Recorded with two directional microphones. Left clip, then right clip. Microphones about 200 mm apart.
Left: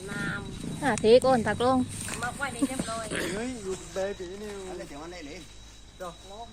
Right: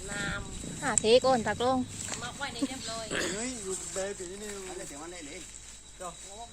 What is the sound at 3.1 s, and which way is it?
Speech, 35° right (ahead or behind).